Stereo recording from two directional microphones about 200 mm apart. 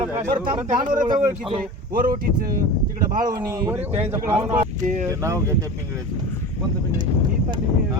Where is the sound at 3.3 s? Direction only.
15° right (ahead or behind).